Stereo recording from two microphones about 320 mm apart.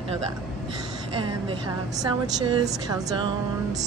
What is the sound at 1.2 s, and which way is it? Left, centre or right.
A woman's voice, centre.